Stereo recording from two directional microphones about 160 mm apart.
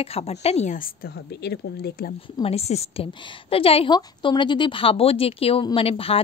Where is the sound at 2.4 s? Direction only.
40° left (ahead or behind).